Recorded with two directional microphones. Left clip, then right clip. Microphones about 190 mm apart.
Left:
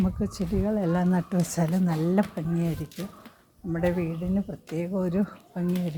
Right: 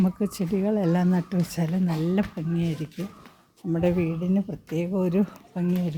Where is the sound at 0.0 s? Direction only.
30° right (ahead or behind).